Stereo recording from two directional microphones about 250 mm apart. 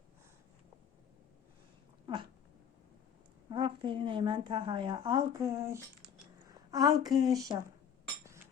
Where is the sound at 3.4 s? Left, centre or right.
Centre.